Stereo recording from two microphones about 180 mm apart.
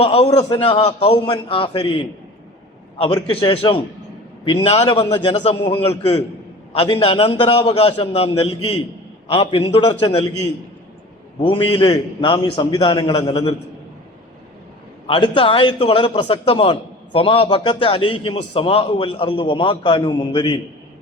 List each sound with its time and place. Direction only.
0.0 s a man's voice: 35° left (ahead or behind)
11.3 s a man's voice: 30° left (ahead or behind)
15.0 s a man's voice: 30° left (ahead or behind)